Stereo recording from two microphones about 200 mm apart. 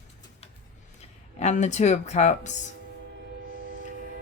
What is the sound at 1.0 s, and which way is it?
Speech, 35° left (ahead or behind).